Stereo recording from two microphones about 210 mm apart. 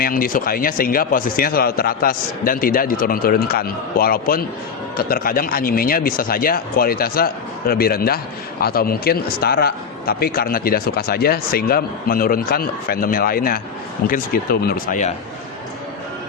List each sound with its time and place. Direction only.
0.0 s a man's voice: 40° left (ahead or behind)